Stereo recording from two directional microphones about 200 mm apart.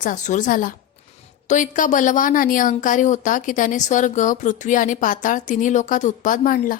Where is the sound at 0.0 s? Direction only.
40° left (ahead or behind).